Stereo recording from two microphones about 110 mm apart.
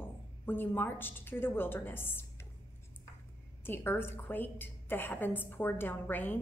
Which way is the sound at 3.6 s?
20° left (ahead or behind).